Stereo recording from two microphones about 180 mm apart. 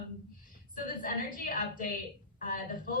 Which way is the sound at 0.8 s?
50° left (ahead or behind).